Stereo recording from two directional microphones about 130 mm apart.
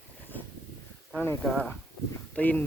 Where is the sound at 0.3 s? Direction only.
15° left (ahead or behind).